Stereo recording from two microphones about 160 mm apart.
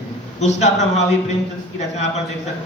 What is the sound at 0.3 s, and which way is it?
Speech, 45° left (ahead or behind).